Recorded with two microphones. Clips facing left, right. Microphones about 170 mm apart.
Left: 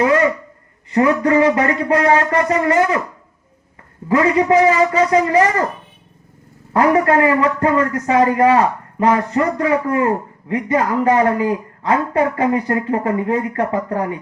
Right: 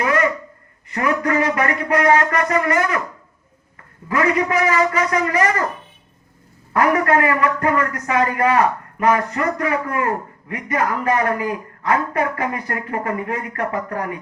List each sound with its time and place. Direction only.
0.0 s a sound: 25° left (ahead or behind)
0.9 s a man's voice: 25° left (ahead or behind)
4.1 s a man's voice: 25° left (ahead or behind)
6.7 s a man's voice: 25° left (ahead or behind)